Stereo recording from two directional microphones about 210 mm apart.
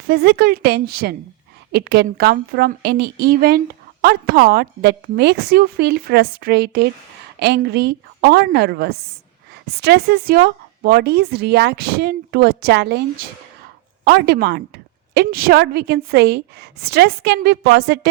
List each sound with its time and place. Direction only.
0.1 s a woman's voice: 50° right (ahead or behind)